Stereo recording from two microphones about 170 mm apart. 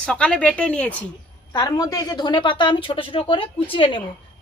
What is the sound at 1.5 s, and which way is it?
A woman's voice, 25° left (ahead or behind).